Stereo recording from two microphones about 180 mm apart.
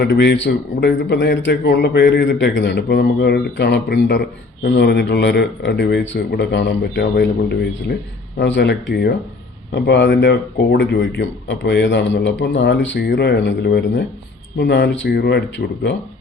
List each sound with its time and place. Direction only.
0.1 s a man's voice: 85° left; by 2.5 s 55° left (ahead or behind)
2.5 s a man's voice: 80° left
8.4 s speech: 75° left (ahead or behind)
8.9 s a man's voice: 55° left (ahead or behind)
9.7 s a man's voice: 65° left (ahead or behind)